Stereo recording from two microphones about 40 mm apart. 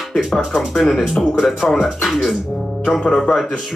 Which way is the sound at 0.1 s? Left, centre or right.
Centre.